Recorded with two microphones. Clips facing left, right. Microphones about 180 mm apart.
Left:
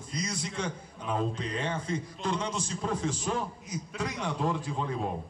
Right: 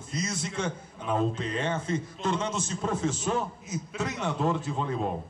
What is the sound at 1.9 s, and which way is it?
A man's voice, 25° right (ahead or behind).